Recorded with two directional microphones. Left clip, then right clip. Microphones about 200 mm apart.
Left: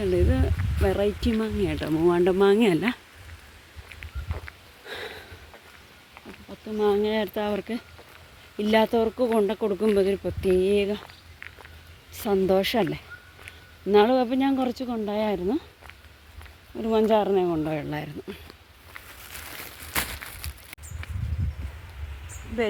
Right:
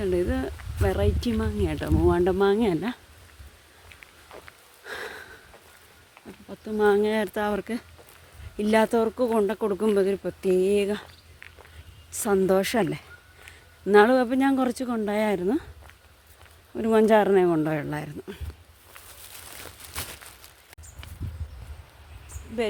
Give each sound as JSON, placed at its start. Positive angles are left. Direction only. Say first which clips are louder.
{"t": 0.0, "sound": "speech", "louder": "left 1 dB", "side_deg": 0}
{"t": 3.8, "sound": "a sound", "louder": "left 5 dB", "side_deg": 5}
{"t": 4.9, "sound": "a sound", "louder": "right 1 dB", "side_deg": -10}
{"t": 6.5, "sound": "speech", "louder": "right 2 dB", "side_deg": -25}
{"t": 12.1, "sound": "speech", "louder": "even", "side_deg": -15}
{"t": 16.7, "sound": "speech", "louder": "right 2 dB", "side_deg": -30}
{"t": 17.7, "sound": "speech", "louder": "even", "side_deg": -10}